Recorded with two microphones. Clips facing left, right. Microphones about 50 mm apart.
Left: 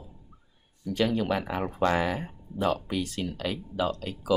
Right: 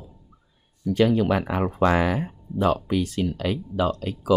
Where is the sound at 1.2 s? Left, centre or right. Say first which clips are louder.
Right 6 dB; right.